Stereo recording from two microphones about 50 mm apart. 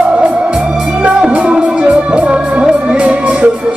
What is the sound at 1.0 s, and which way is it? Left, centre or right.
Music, right.